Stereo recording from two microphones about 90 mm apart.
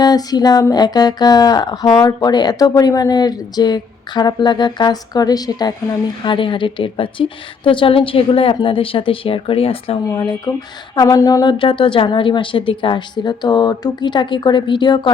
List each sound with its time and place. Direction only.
0.0 s speech: 45° left (ahead or behind); by 10.0 s 90° left
10.2 s speech: 50° left (ahead or behind)
11.1 s a sound: 40° left (ahead or behind)
11.4 s a woman's voice: 65° left (ahead or behind)